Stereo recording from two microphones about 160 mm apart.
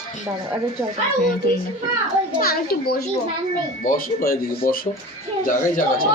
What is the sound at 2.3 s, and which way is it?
Speech, 70° left (ahead or behind).